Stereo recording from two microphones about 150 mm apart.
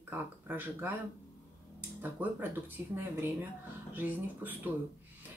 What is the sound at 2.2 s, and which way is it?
Speech, 10° right (ahead or behind).